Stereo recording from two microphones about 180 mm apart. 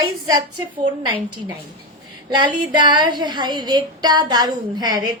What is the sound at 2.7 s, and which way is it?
A woman's voice, 25° right (ahead or behind).